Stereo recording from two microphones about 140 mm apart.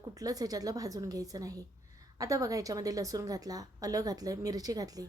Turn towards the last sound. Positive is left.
turn(degrees=-25)  # may be behind; listen again after turning